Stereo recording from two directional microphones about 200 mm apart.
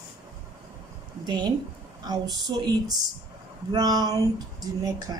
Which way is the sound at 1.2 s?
20° right (ahead or behind).